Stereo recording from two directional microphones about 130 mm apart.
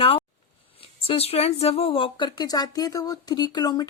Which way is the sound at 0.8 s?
45° left (ahead or behind).